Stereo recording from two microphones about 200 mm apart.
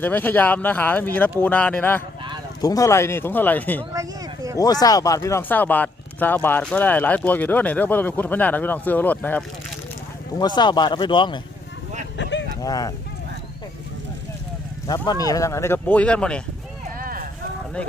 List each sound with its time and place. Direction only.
0.0 s speech: 10° left (ahead or behind)
4.5 s speech: 20° left (ahead or behind)
10.3 s speech: 20° left (ahead or behind)
12.1 s a sound: 65° left (ahead or behind)
12.6 s speech: 20° left (ahead or behind)
14.8 s speech: 20° left (ahead or behind)
17.0 s a sound: 45° right (ahead or behind)